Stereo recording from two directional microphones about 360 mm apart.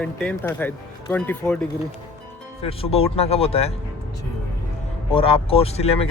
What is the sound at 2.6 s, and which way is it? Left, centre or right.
Speech, centre.